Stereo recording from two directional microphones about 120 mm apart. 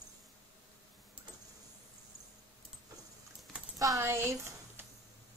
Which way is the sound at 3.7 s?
25° right (ahead or behind).